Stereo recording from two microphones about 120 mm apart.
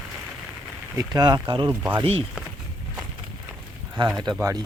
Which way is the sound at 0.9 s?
35° right (ahead or behind).